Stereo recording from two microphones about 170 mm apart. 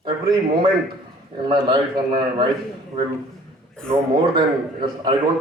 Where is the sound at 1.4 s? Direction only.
25° right (ahead or behind).